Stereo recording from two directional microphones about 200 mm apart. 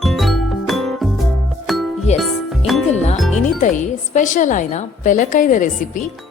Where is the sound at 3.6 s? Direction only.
40° left (ahead or behind).